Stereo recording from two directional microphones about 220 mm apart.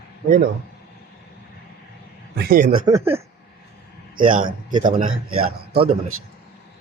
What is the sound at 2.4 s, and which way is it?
Speech, 40° right (ahead or behind).